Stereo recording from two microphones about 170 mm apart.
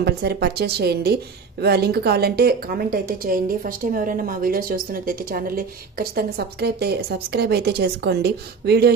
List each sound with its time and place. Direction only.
0.0 s a woman's voice: 70° right (ahead or behind)